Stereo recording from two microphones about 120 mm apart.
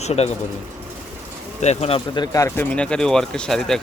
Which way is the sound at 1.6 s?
65° left (ahead or behind).